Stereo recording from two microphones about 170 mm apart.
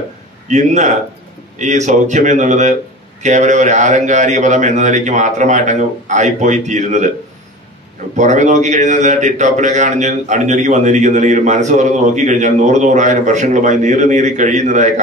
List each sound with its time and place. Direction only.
0.5 s a man's voice: 45° right (ahead or behind)
8.2 s a man's voice: 45° right (ahead or behind)